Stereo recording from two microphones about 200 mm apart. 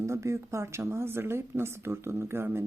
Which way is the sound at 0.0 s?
15° right (ahead or behind).